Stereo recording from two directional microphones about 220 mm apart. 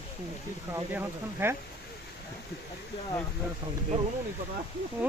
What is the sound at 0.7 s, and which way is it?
Speech, 10° right (ahead or behind).